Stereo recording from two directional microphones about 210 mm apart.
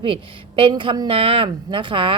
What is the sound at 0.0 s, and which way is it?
A woman's voice, 25° right (ahead or behind).